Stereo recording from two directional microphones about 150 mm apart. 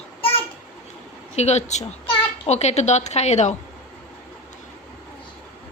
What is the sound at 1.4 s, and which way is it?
A child's voice, 45° left (ahead or behind).